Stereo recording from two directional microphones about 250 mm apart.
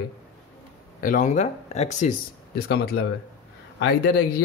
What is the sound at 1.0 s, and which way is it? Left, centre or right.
Speech, left.